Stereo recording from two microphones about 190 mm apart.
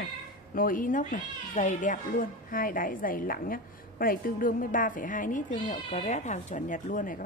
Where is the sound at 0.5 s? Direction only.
45° left (ahead or behind).